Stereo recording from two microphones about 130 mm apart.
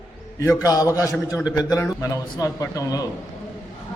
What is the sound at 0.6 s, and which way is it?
A man's voice, 25° left (ahead or behind).